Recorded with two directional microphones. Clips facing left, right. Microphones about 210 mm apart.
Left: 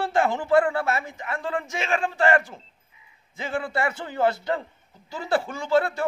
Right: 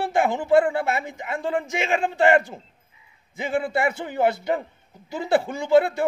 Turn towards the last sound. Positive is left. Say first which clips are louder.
# right 4 dB
turn(degrees=-20)  # may be behind; listen again after turning